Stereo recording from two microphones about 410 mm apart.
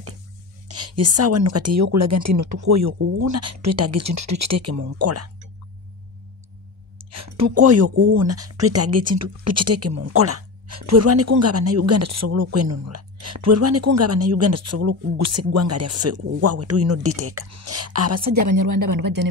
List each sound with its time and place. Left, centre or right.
0.7 s speech: right
7.0 s speech: right